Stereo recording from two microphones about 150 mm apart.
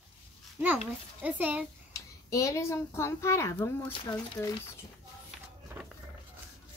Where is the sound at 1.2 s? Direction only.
10° right (ahead or behind).